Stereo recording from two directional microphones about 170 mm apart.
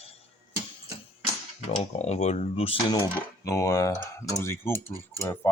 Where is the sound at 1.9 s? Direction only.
40° left (ahead or behind); by 4.7 s 15° left (ahead or behind).